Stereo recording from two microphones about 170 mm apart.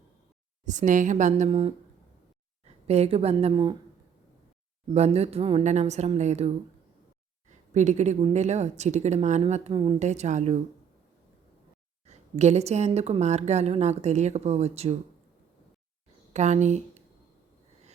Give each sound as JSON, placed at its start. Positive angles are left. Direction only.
{"t": 0.6, "sound": "a woman's voice", "side_deg": -45}
{"t": 2.8, "sound": "a woman's voice", "side_deg": -40}
{"t": 4.9, "sound": "a woman's voice", "side_deg": -40}
{"t": 7.7, "sound": "a woman's voice", "side_deg": -45}
{"t": 12.0, "sound": "a woman's voice", "side_deg": -40}
{"t": 16.3, "sound": "speech", "side_deg": -45}